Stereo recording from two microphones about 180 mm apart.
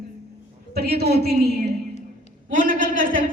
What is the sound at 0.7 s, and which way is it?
Speech, 60° right (ahead or behind).